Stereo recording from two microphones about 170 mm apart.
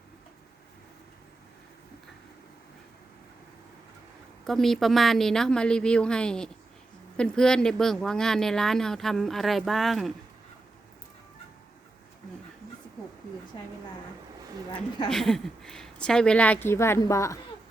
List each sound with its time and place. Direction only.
4.4 s speech: centre (ahead or behind)
13.5 s speech: 25° left (ahead or behind)
15.1 s a woman's voice: 5° left (ahead or behind)